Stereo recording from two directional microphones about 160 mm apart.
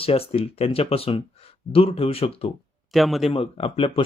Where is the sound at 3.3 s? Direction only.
35° left (ahead or behind).